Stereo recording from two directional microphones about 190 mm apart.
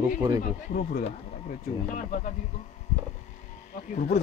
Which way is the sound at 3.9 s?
40° left (ahead or behind).